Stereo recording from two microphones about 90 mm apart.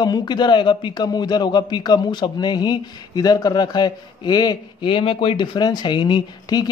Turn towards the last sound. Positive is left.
turn(degrees=50)  # may be behind; listen again after turning